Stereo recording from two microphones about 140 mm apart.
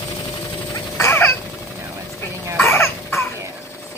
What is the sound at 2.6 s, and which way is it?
Cough, 15° left (ahead or behind).